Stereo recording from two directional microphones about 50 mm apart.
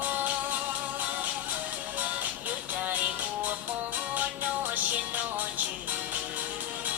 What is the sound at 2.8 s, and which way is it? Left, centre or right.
Music, right.